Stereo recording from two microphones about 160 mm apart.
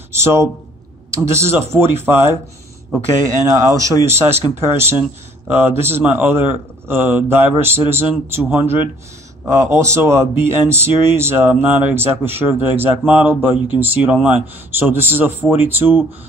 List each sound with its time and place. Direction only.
0.1 s speech: 15° right (ahead or behind)
3.4 s speech: 20° right (ahead or behind)